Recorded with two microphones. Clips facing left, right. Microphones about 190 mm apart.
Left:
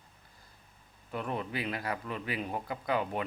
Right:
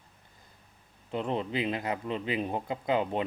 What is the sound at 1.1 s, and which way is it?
Speech, 25° right (ahead or behind).